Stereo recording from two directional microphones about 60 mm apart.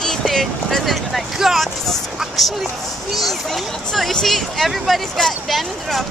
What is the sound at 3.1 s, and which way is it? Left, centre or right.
Speech, centre.